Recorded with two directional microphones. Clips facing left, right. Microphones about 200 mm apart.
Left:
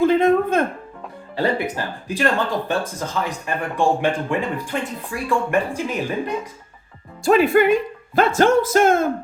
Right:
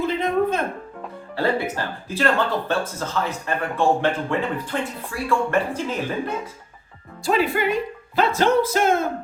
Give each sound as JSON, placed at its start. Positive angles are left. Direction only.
{"t": 0.0, "sound": "a sound", "side_deg": 50}
{"t": 1.4, "sound": "speech", "side_deg": 15}
{"t": 7.3, "sound": "speech", "side_deg": 50}